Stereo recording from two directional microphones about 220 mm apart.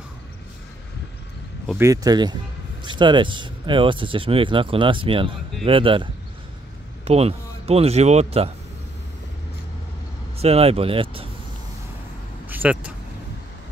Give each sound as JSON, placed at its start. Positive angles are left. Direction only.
{"t": 1.8, "sound": "speech", "side_deg": -15}
{"t": 7.1, "sound": "speech", "side_deg": -30}
{"t": 10.4, "sound": "speech", "side_deg": -25}
{"t": 12.4, "sound": "vehicle", "side_deg": -5}